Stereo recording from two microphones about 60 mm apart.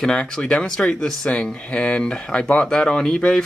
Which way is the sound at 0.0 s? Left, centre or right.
Centre.